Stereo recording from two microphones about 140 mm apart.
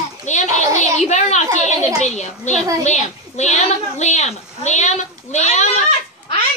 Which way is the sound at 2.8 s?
55° left (ahead or behind).